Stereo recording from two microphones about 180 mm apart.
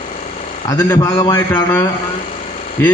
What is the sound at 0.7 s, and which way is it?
A man's voice, 20° left (ahead or behind).